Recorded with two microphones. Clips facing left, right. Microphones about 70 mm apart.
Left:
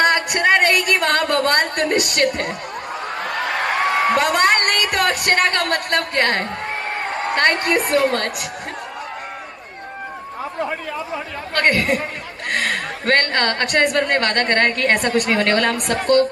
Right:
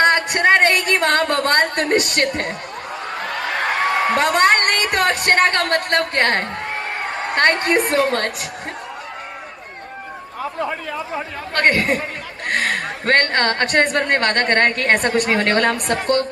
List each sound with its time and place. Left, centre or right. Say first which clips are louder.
0.0 s a sound: right 1 dB; right
4.2 s a woman's voice: right 1 dB; right
11.1 s a woman's voice: even; right